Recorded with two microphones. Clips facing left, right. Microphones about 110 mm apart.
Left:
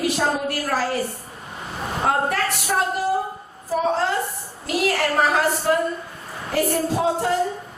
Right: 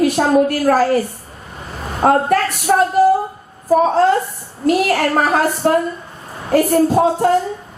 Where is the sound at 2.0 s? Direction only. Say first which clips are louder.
Right 8 dB; 50° right (ahead or behind).